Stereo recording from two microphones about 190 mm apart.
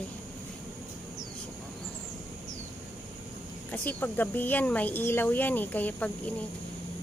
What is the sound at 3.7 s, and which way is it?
Speech, 10° left (ahead or behind).